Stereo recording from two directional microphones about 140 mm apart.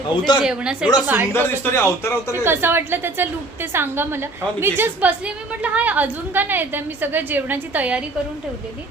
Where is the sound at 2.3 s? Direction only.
15° right (ahead or behind).